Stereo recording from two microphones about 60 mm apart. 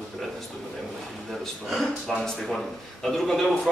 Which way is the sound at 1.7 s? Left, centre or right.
Centre.